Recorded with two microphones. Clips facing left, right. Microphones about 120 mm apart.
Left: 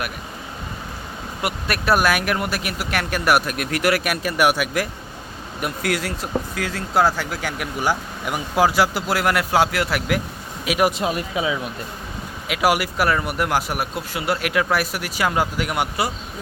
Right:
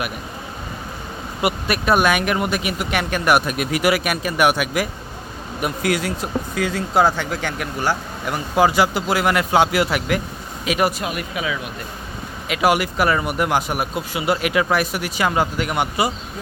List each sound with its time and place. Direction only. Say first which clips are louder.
1.4 s speech: right 4 dB; centre (ahead or behind)
10.9 s speech: left 3 dB; 30° left (ahead or behind)
12.5 s speech: right 2 dB; 5° left (ahead or behind)